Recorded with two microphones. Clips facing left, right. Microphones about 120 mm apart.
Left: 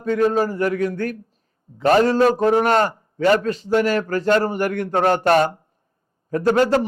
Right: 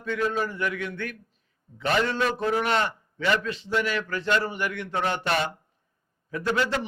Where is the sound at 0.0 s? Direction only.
40° left (ahead or behind).